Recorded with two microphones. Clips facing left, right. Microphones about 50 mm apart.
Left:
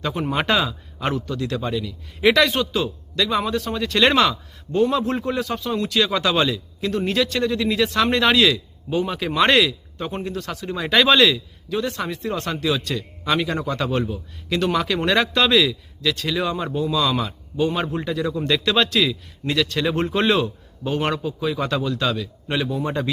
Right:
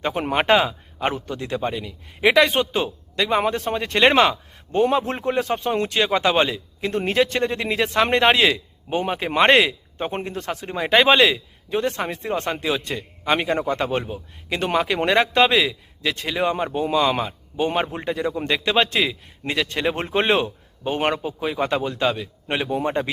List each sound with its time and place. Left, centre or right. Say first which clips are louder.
0.0 s speech: right 1 dB; right
8.9 s a man's voice: even; right
9.1 s speech: right 2 dB; right
17.7 s speech: even; right